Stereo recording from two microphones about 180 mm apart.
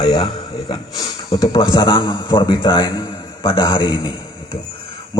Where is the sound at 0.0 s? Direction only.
20° left (ahead or behind).